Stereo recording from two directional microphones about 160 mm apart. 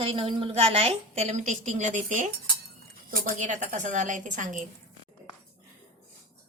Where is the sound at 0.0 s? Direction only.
35° right (ahead or behind); by 4.6 s 55° right (ahead or behind).